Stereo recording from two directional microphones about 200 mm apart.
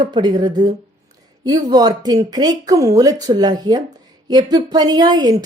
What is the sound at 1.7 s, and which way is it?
A woman's voice, 20° right (ahead or behind).